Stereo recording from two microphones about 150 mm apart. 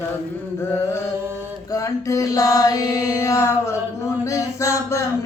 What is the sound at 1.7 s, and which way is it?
Music, 20° left (ahead or behind).